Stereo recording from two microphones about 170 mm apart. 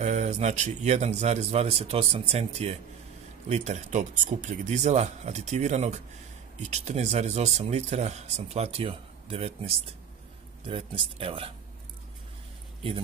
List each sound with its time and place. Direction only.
0.0 s speech: 45° right (ahead or behind)